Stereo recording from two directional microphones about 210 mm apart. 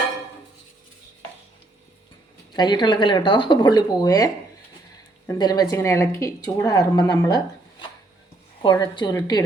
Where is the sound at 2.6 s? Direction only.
20° left (ahead or behind).